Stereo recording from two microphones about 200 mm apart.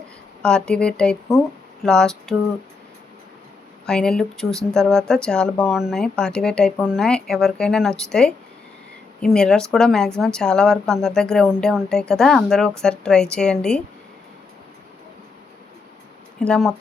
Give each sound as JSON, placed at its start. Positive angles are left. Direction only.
{"t": 0.4, "sound": "speech", "side_deg": 5}
{"t": 3.8, "sound": "speech", "side_deg": 5}
{"t": 16.4, "sound": "speech", "side_deg": 5}